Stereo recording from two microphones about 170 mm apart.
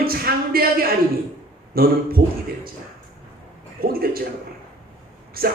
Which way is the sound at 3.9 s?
60° right (ahead or behind).